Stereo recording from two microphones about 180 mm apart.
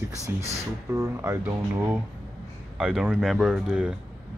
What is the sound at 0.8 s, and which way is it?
Speech, 15° right (ahead or behind).